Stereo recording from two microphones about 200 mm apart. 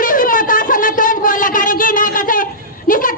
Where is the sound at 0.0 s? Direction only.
45° left (ahead or behind).